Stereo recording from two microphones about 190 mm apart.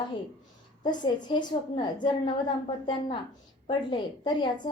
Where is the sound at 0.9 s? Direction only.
25° left (ahead or behind).